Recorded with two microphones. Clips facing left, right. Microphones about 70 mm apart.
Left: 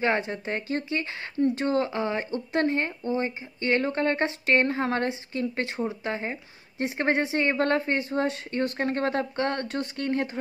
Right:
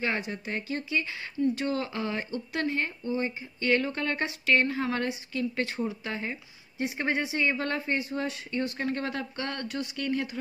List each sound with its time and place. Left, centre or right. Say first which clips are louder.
0.0 s speech: left 5 dB; left
6.8 s speech: left 4 dB; left